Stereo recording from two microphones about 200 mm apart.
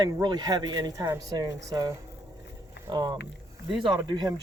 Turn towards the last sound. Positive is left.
turn(degrees=-20)  # may be behind; listen again after turning